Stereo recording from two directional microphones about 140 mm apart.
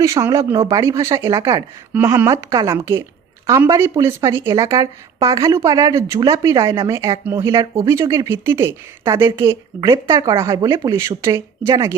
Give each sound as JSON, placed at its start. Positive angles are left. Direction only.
{"t": 0.0, "sound": "a woman's voice", "side_deg": -20}
{"t": 2.5, "sound": "a woman's voice", "side_deg": -30}
{"t": 2.7, "sound": "a woman's voice", "side_deg": -20}